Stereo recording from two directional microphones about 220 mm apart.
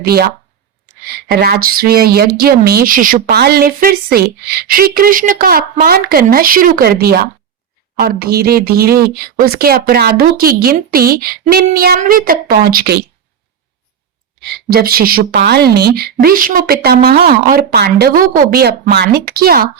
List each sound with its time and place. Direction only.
0.0 s speech: 45° right (ahead or behind)
14.4 s speech: 45° right (ahead or behind)